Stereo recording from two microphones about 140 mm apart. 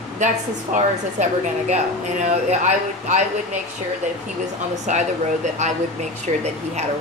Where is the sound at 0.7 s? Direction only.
60° right (ahead or behind).